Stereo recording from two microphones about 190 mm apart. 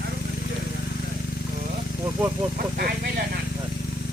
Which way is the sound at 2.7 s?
55° right (ahead or behind).